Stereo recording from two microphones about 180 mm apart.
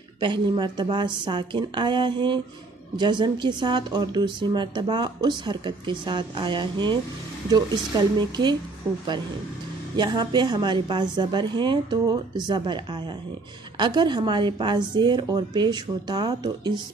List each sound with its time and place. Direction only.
0.2 s a woman's voice: 25° right (ahead or behind)
9.9 s a woman's voice: 25° right (ahead or behind)